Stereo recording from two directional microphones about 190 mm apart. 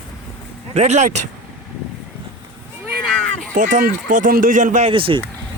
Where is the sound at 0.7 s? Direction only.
35° right (ahead or behind).